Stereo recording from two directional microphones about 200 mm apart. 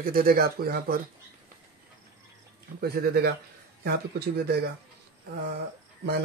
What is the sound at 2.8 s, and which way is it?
Speech, 50° right (ahead or behind).